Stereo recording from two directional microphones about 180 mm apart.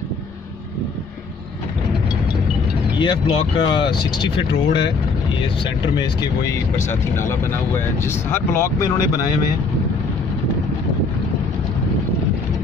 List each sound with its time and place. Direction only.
3.0 s speech: 30° left (ahead or behind)
6.5 s speech: 15° left (ahead or behind)